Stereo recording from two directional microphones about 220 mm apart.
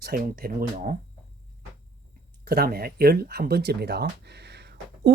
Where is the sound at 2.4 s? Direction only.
45° right (ahead or behind).